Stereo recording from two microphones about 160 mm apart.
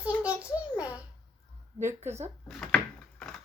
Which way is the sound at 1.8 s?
15° right (ahead or behind).